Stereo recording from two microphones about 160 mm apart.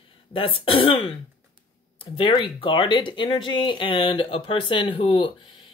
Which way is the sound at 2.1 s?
30° left (ahead or behind).